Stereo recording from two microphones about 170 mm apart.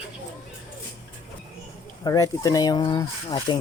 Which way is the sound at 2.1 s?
20° left (ahead or behind).